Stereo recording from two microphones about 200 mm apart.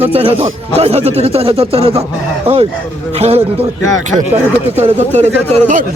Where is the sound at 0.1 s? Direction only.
30° right (ahead or behind).